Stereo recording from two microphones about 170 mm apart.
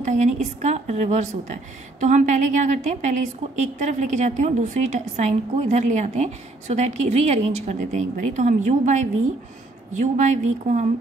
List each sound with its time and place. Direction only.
0.0 s a woman's voice: 45° right (ahead or behind)